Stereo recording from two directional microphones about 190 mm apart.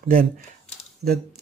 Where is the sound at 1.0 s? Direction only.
55° right (ahead or behind).